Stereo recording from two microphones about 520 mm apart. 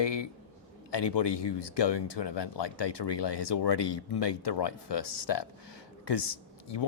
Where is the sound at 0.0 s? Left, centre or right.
Left.